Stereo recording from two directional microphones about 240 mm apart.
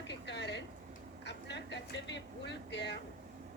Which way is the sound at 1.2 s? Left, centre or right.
Left.